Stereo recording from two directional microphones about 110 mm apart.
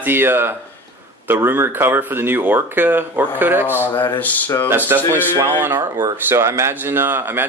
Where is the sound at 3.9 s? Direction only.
40° left (ahead or behind).